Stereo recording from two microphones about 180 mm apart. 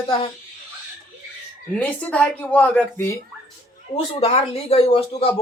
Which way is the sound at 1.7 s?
10° left (ahead or behind).